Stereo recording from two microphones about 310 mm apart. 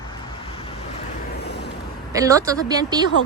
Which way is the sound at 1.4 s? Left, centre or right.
Left.